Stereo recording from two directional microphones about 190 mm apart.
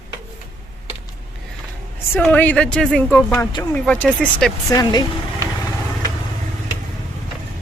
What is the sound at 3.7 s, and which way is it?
Speech, 5° left (ahead or behind).